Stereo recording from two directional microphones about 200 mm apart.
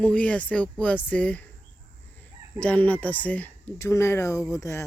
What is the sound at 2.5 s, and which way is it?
Speech, 5° left (ahead or behind).